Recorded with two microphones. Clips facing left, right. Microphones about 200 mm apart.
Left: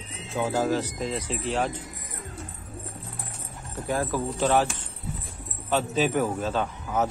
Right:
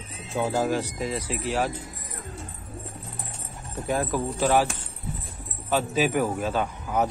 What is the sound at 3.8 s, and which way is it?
Speech, 20° right (ahead or behind).